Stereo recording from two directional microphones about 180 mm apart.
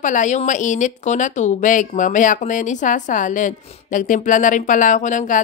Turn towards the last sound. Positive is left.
turn(degrees=45)  # may be behind; listen again after turning